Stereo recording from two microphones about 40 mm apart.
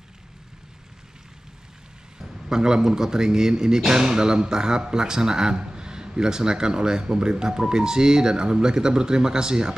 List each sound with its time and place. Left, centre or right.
2.1 s speech: centre